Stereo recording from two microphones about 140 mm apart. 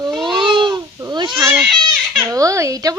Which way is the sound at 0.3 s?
35° right (ahead or behind).